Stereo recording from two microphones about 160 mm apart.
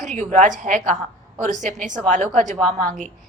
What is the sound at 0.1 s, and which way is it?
A woman's voice, 50° right (ahead or behind).